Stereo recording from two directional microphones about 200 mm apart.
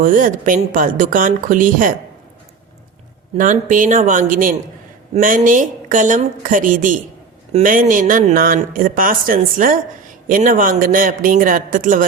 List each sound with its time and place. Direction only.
0.0 s speech: 40° right (ahead or behind)
3.3 s a woman's voice: 40° right (ahead or behind)